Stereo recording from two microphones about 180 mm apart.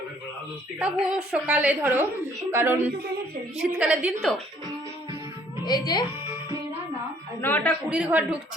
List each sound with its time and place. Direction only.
0.8 s a woman's voice: 5° right (ahead or behind)
5.6 s speech: 20° left (ahead or behind)
7.4 s a man's voice: 10° left (ahead or behind)
7.9 s a woman's voice: 5° right (ahead or behind)